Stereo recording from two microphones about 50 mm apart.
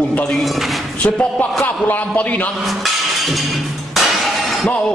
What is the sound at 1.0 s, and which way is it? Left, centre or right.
A man's voice, left.